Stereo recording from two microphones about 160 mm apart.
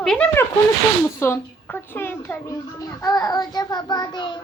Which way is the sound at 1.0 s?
15° left (ahead or behind).